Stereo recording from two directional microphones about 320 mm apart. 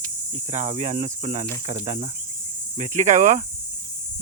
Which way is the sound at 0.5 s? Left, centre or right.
Right.